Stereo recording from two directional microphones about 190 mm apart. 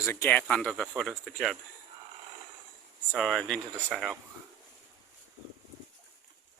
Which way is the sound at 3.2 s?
Centre (ahead or behind).